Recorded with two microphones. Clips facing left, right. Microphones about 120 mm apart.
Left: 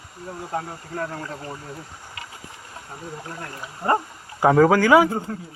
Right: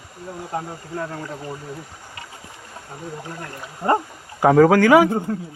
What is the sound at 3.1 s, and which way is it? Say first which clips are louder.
Speech: right 1 dB; 20° right (ahead or behind).